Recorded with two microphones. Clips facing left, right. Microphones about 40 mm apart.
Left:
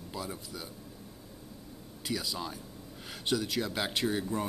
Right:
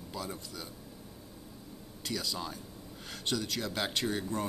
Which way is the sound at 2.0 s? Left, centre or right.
Centre.